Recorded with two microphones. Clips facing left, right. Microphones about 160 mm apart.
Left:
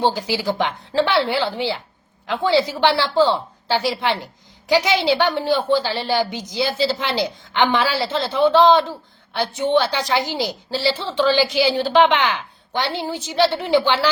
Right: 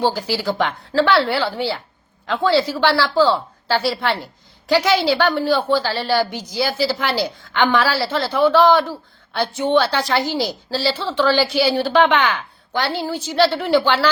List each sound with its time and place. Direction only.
0.0 s a woman's voice: 20° left (ahead or behind)